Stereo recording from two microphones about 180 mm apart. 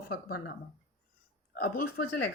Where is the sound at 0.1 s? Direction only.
60° left (ahead or behind).